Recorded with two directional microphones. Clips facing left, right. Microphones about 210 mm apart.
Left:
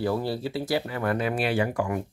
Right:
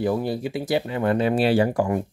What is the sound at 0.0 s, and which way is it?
Speech, 15° right (ahead or behind).